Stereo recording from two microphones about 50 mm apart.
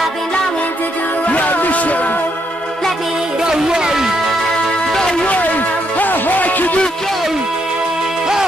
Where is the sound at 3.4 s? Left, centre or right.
Centre.